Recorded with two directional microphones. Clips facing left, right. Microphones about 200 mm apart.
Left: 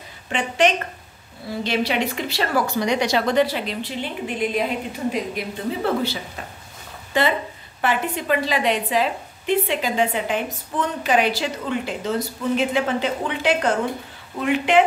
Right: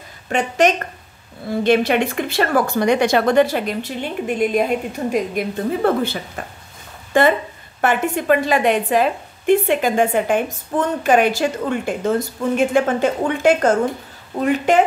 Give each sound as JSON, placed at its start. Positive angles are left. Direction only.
{"t": 0.3, "sound": "a woman's voice", "side_deg": -45}